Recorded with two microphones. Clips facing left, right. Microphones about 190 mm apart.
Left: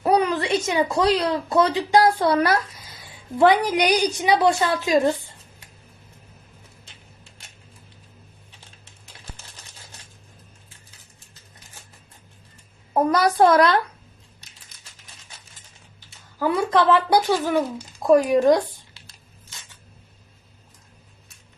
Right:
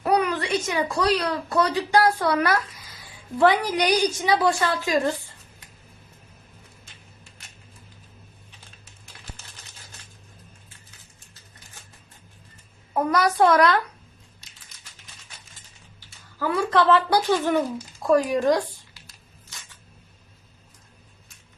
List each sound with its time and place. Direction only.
0.0 s a woman's voice: 25° left (ahead or behind)
12.9 s a child's voice: 35° left (ahead or behind)
16.0 s speech: 20° left (ahead or behind)
18.0 s tearing: 20° left (ahead or behind)